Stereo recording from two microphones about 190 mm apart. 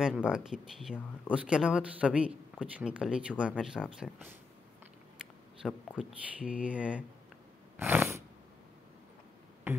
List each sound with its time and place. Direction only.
0.0 s speech: 5° right (ahead or behind)
5.6 s speech: 5° left (ahead or behind)
5.9 s speech: 5° right (ahead or behind)
9.7 s music: 10° right (ahead or behind)